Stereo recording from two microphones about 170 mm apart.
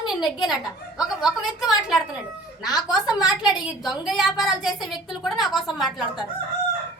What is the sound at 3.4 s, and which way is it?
A woman's voice, centre (ahead or behind).